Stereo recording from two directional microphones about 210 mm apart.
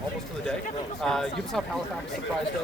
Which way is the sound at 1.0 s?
Centre (ahead or behind).